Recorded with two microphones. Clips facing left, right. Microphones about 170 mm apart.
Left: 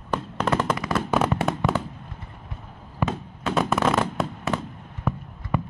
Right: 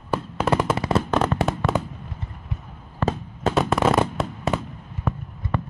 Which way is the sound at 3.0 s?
10° left (ahead or behind).